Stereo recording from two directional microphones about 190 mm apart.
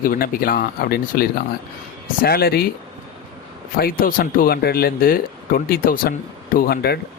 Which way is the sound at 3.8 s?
50° left (ahead or behind).